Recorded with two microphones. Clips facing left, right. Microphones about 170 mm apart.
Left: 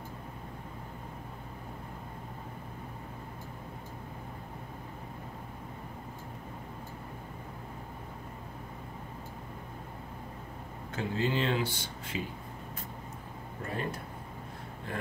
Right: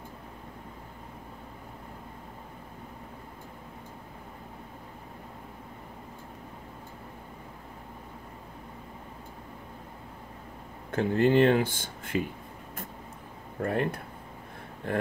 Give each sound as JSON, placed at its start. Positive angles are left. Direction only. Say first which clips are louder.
{"t": 10.9, "sound": "speech", "louder": "right 8 dB", "side_deg": -55}
{"t": 13.6, "sound": "speech", "louder": "right 8 dB", "side_deg": -60}